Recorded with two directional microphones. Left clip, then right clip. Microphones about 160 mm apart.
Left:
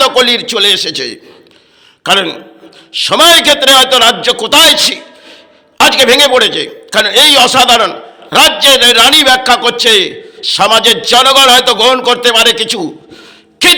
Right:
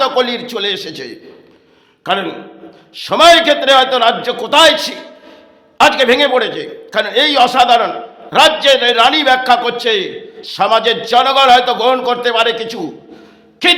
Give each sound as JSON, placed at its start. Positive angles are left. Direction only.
{"t": 0.0, "sound": "a man's voice", "side_deg": 20}
{"t": 13.6, "sound": "music", "side_deg": 25}